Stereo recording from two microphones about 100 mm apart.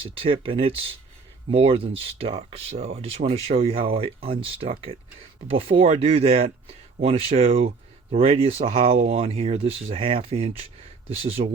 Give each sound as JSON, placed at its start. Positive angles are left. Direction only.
{"t": 0.0, "sound": "speech", "side_deg": -65}